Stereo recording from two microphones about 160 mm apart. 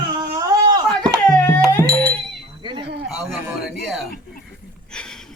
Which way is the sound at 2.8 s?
90° right.